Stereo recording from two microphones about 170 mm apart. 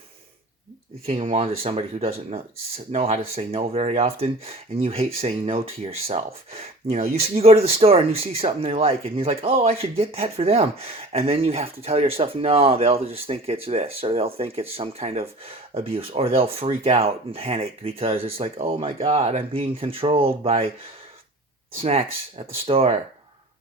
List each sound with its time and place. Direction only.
1.3 s speech: 35° right (ahead or behind)
21.8 s speech: 35° right (ahead or behind)